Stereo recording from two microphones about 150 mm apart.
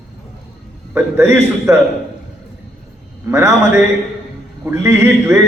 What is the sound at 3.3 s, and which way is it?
A man's voice, 20° right (ahead or behind).